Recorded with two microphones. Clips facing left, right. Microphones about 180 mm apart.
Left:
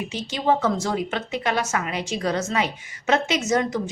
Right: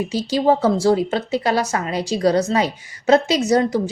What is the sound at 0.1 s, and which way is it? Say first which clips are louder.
A woman's voice: right 5 dB; 35° right (ahead or behind).